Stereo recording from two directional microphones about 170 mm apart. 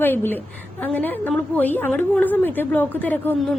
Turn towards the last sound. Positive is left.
turn(degrees=10)  # may be behind; listen again after turning